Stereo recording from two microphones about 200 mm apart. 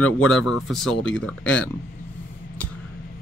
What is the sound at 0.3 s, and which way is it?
Speech, centre (ahead or behind).